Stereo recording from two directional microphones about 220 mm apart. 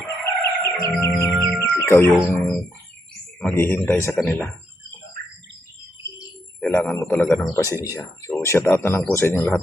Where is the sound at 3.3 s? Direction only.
10° left (ahead or behind).